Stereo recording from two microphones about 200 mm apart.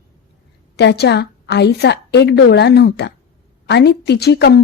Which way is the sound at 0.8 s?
55° left (ahead or behind).